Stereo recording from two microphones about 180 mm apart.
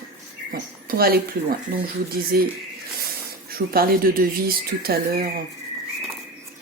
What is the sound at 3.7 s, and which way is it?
Speech, 55° right (ahead or behind).